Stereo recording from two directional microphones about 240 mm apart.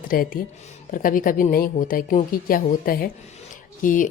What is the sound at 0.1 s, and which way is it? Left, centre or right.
Speech, left.